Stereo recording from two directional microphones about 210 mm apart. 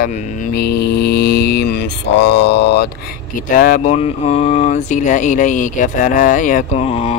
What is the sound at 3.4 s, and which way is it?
Speech, 40° left (ahead or behind).